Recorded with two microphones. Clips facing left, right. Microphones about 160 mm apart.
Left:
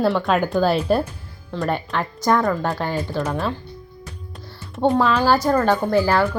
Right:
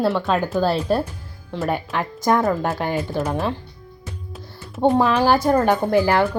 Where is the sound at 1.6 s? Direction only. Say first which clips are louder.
Even; 10° right (ahead or behind).